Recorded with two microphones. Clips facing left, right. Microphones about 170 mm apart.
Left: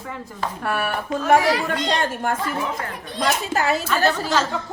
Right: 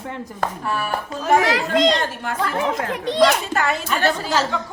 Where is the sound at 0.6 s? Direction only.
65° left (ahead or behind).